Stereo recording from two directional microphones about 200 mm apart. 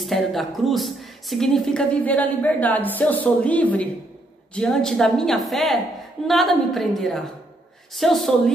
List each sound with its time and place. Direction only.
0.0 s a woman's voice: centre (ahead or behind)